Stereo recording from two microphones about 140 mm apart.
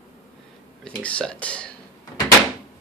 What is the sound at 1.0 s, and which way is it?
Speech, 10° left (ahead or behind).